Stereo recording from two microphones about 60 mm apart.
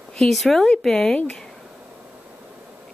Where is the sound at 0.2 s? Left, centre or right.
Centre.